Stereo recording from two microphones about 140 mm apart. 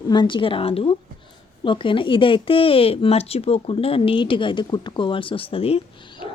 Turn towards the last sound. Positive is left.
turn(degrees=45)  # may be behind; listen again after turning